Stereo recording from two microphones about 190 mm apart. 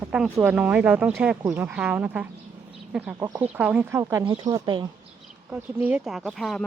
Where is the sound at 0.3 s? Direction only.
10° right (ahead or behind).